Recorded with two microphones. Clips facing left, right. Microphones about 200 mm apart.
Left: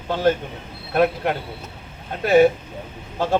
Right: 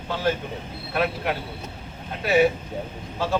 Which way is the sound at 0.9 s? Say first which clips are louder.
Left 6 dB; 45° left (ahead or behind).